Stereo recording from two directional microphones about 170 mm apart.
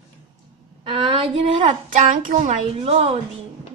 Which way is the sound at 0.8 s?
30° right (ahead or behind).